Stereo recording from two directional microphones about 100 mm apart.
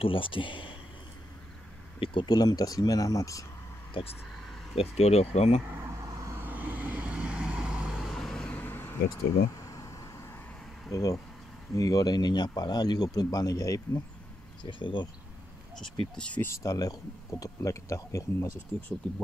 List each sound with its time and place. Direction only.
0.0 s speech: 60° left (ahead or behind)
2.0 s speech: 55° left (ahead or behind); by 3.4 s 35° left (ahead or behind)
3.9 s speech: 75° left (ahead or behind)
4.7 s speech: 90° left
5.7 s vehicle: 25° right (ahead or behind)
6.3 s vehicle: 15° right (ahead or behind); by 8.5 s 5° left (ahead or behind)
8.5 s vehicle: 20° left (ahead or behind)
9.6 s a sound: 35° left (ahead or behind)
10.9 s speech: 35° left (ahead or behind)
14.6 s speech: 55° left (ahead or behind)
16.2 s speech: 10° left (ahead or behind)
16.4 s speech: 35° left (ahead or behind)